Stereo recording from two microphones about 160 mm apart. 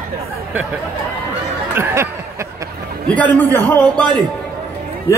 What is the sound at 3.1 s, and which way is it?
A man's voice, 10° left (ahead or behind).